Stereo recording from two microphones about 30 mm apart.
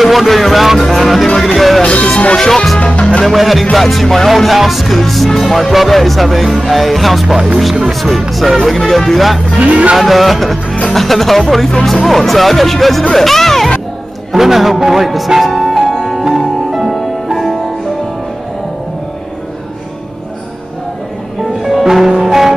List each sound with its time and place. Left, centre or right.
0.0 s music: centre
1.8 s music: left
2.3 s music: centre
2.8 s music: left
3.3 s music: centre
9.6 s speech: right
9.9 s music: centre
13.1 s speech: centre
14.3 s a man's voice: centre
15.4 s music: centre
21.4 s music: centre